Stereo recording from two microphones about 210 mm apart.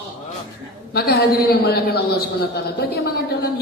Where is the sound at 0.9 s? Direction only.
50° left (ahead or behind).